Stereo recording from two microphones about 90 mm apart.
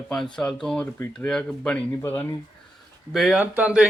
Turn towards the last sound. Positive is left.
turn(degrees=-10)  # may be behind; listen again after turning